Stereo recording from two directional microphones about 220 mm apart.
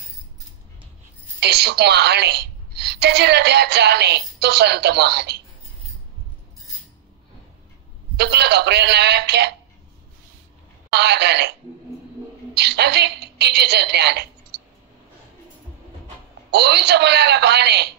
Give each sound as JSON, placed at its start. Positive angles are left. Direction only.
{"t": 1.4, "sound": "a woman's voice", "side_deg": -50}
{"t": 8.2, "sound": "a woman's voice", "side_deg": -50}
{"t": 10.9, "sound": "a woman's voice", "side_deg": -50}
{"t": 12.5, "sound": "a woman's voice", "side_deg": -50}
{"t": 16.4, "sound": "a woman's voice", "side_deg": -50}